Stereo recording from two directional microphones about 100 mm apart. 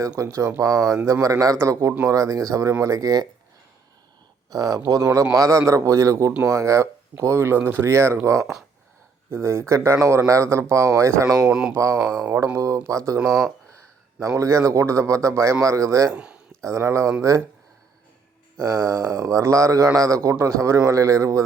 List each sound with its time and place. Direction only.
0.2 s a man's voice: 30° right (ahead or behind)
4.4 s a man's voice: 40° right (ahead or behind)
11.3 s speech: 5° right (ahead or behind)
11.7 s a man's voice: 30° right (ahead or behind)
14.2 s a man's voice: 30° right (ahead or behind)
16.1 s speech: 10° right (ahead or behind)
16.6 s a man's voice: 30° right (ahead or behind)
18.6 s a man's voice: 40° right (ahead or behind)